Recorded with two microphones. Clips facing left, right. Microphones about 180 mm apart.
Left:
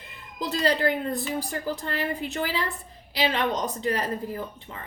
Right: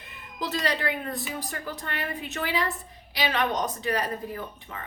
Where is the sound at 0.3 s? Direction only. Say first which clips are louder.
Left 4 dB; 30° left (ahead or behind).